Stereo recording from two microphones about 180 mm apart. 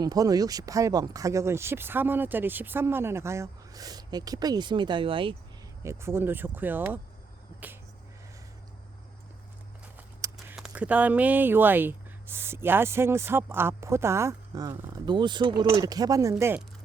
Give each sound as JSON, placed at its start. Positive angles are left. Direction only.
{"t": 0.0, "sound": "speech", "side_deg": -20}
{"t": 5.8, "sound": "speech", "side_deg": -15}
{"t": 10.3, "sound": "a sound", "side_deg": 0}
{"t": 10.7, "sound": "speech", "side_deg": -10}